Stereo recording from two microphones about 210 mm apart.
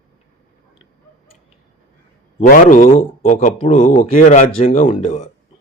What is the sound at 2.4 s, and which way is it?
A man's voice, 35° left (ahead or behind).